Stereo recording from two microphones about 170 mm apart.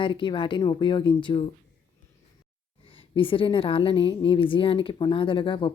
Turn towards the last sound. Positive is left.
turn(degrees=30)  # may be behind; listen again after turning